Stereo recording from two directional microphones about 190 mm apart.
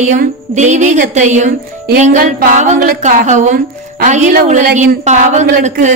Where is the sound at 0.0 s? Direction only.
40° right (ahead or behind).